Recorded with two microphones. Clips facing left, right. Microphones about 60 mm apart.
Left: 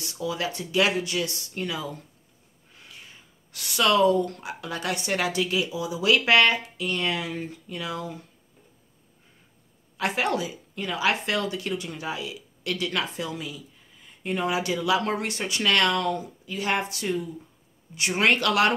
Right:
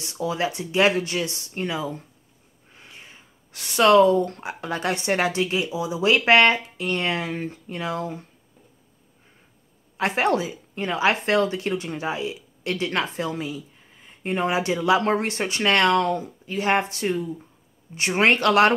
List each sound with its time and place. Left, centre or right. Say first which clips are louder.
0.0 s speech: right 4 dB; right
9.9 s speech: right 4 dB; right